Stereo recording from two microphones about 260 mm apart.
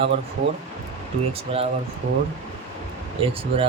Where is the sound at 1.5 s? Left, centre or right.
Right.